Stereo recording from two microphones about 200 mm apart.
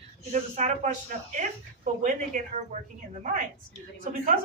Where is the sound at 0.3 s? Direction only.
35° right (ahead or behind).